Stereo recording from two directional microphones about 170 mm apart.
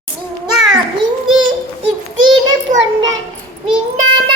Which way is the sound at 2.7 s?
50° right (ahead or behind).